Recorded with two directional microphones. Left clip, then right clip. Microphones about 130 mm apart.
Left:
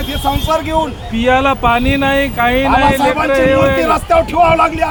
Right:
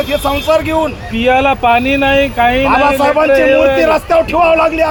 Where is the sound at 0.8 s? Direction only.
20° left (ahead or behind).